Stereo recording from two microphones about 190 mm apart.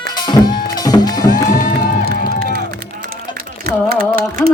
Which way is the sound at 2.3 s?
60° right (ahead or behind).